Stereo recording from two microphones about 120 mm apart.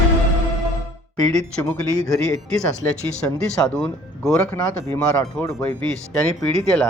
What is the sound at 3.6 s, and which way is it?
Speech, 5° left (ahead or behind).